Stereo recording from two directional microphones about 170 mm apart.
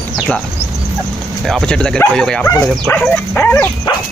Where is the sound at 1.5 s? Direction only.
5° left (ahead or behind).